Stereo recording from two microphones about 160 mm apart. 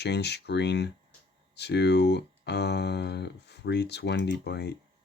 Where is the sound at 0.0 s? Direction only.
90° left.